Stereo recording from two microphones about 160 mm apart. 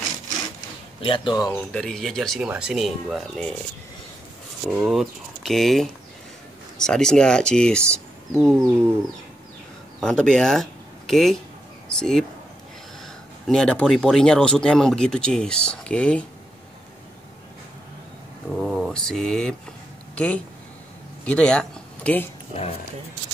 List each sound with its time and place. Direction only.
1.0 s speech: 30° left (ahead or behind)
1.5 s speech: 5° left (ahead or behind)
4.6 s speech: centre (ahead or behind)
8.5 s bird: 15° right (ahead or behind)
9.9 s speech: 5° left (ahead or behind)
13.5 s speech: 5° left (ahead or behind)
18.5 s speech: centre (ahead or behind)